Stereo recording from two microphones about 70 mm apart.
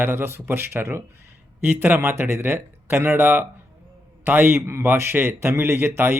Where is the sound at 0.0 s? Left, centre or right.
Right.